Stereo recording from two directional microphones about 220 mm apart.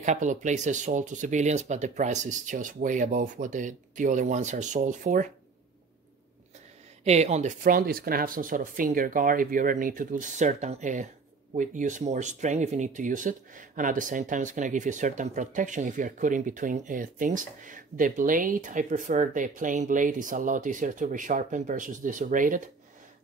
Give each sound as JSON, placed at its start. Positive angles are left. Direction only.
{"t": 0.0, "sound": "speech", "side_deg": -35}
{"t": 7.1, "sound": "speech", "side_deg": -30}